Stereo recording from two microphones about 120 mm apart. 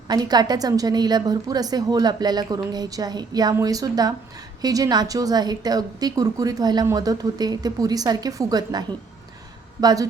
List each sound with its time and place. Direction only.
0.1 s a woman's voice: 35° right (ahead or behind)
9.8 s speech: 30° right (ahead or behind)